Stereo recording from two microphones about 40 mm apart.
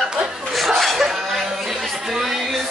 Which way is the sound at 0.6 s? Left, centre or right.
Centre.